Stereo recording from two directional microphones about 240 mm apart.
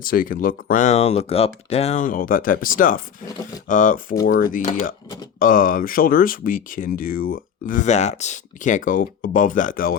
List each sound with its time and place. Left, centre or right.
0.0 s speech: left